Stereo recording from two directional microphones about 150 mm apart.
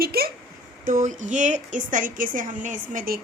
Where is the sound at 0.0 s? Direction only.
90° right.